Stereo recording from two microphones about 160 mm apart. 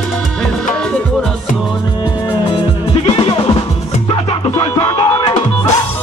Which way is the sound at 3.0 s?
30° left (ahead or behind).